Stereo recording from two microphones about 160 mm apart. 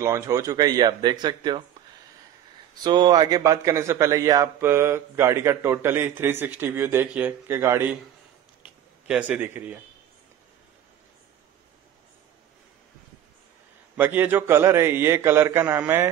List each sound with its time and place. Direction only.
0.0 s speech: 20° right (ahead or behind)
2.7 s a man's voice: 25° right (ahead or behind)
9.0 s a man's voice: 5° right (ahead or behind)
13.9 s a man's voice: 10° right (ahead or behind)